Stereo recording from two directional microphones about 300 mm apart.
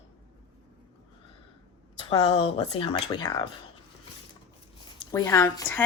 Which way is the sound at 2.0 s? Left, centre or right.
Centre.